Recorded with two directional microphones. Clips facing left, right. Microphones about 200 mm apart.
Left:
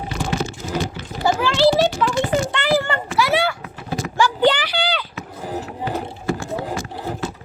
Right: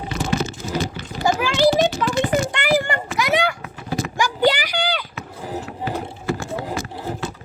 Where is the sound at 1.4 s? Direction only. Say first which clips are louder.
Left 1 dB; 15° right (ahead or behind).